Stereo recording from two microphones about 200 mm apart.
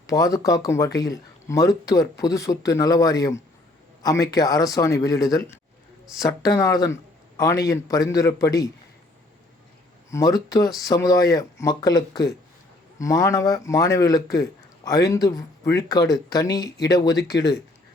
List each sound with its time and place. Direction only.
0.1 s speech: 15° left (ahead or behind)
6.6 s speech: 15° left (ahead or behind)
10.1 s speech: 15° left (ahead or behind)